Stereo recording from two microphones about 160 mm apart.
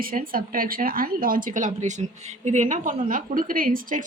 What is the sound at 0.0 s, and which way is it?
A woman's voice, 60° right (ahead or behind).